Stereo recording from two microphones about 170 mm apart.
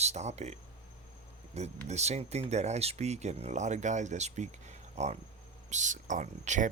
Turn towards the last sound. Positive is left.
turn(degrees=-50)  # may be behind; listen again after turning